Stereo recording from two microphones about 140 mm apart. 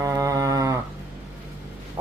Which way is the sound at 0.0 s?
25° right (ahead or behind).